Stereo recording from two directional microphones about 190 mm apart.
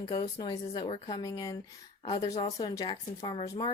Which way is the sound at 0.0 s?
25° left (ahead or behind).